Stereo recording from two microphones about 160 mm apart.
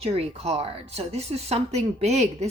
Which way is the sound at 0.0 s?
40° right (ahead or behind).